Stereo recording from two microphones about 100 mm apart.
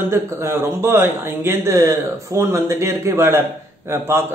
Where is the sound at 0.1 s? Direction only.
25° right (ahead or behind).